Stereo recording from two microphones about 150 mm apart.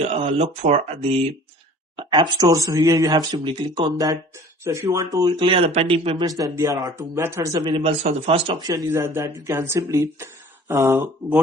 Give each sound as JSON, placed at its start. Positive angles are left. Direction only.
{"t": 0.0, "sound": "speech", "side_deg": -45}
{"t": 2.0, "sound": "speech", "side_deg": -30}
{"t": 6.2, "sound": "speech", "side_deg": -25}
{"t": 7.7, "sound": "speech", "side_deg": -45}